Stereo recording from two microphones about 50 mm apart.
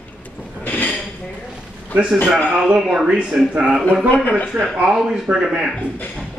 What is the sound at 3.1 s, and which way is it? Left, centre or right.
A man's voice, right.